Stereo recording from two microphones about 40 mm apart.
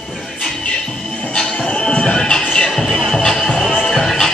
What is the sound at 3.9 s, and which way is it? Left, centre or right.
Music, centre.